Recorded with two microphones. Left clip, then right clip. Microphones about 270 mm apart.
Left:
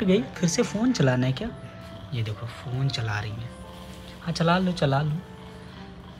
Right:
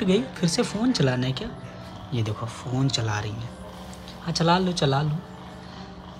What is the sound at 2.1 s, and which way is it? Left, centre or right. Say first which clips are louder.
Speech: right 5 dB; centre.